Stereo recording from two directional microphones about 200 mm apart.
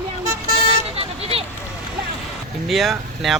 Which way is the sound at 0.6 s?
30° right (ahead or behind).